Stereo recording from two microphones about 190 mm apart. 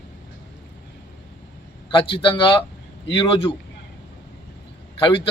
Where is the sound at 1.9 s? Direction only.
25° left (ahead or behind).